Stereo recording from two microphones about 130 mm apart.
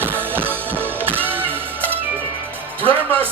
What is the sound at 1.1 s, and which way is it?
Music, 15° right (ahead or behind).